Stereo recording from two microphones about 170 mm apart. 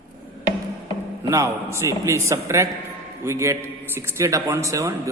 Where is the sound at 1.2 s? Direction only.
15° right (ahead or behind).